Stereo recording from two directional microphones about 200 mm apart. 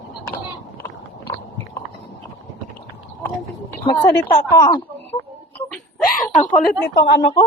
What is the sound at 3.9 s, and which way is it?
Speech, 20° left (ahead or behind).